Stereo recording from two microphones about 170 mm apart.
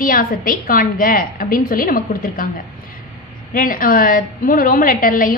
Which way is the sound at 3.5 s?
55° left (ahead or behind).